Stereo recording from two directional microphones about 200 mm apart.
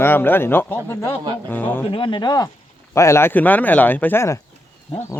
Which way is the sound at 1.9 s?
25° left (ahead or behind).